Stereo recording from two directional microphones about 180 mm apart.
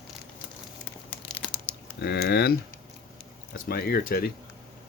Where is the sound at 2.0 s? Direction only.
65° left (ahead or behind).